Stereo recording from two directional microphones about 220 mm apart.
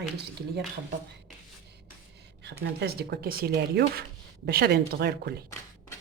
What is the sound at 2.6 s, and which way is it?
Speech, 45° right (ahead or behind).